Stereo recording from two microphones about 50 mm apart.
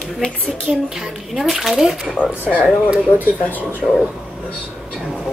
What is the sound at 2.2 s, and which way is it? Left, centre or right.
Speech, left.